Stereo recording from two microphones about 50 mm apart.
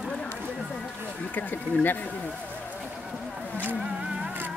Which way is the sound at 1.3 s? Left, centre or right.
Left.